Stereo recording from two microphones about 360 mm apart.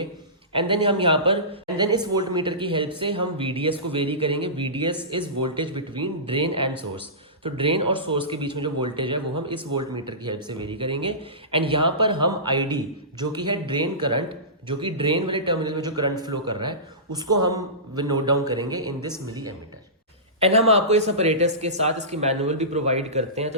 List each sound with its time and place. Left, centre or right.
0.5 s speech: centre